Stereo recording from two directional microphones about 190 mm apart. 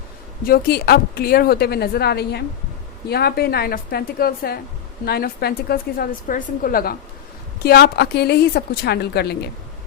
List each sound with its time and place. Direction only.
0.4 s a woman's voice: 55° left (ahead or behind)